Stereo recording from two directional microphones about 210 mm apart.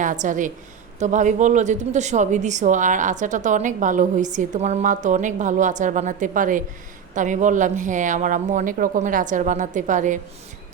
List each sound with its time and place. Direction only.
0.0 s a woman's voice: 40° right (ahead or behind)